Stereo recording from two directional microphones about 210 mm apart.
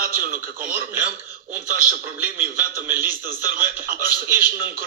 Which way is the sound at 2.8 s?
10° right (ahead or behind).